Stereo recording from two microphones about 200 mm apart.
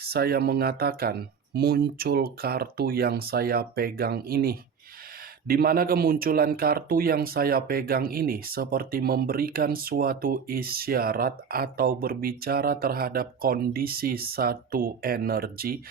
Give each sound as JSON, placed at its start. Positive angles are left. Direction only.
{"t": 0.1, "sound": "speech", "side_deg": -50}